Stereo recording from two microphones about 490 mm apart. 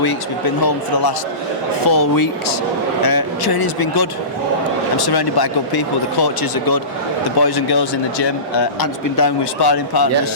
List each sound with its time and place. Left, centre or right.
0.0 s speech: left